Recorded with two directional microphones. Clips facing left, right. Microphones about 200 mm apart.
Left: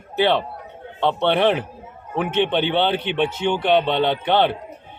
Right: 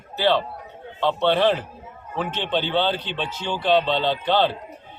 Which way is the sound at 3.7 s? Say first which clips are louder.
Right 1 dB; 60° left (ahead or behind).